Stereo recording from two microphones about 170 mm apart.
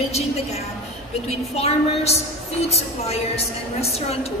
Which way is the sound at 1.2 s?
40° left (ahead or behind).